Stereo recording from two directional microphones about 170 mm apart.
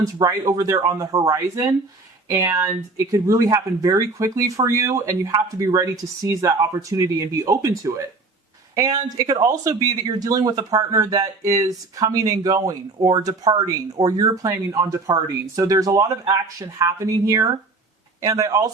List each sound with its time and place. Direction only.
0.0 s speech: 20° right (ahead or behind)